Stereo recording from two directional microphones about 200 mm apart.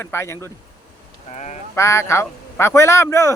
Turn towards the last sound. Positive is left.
turn(degrees=15)  # may be behind; listen again after turning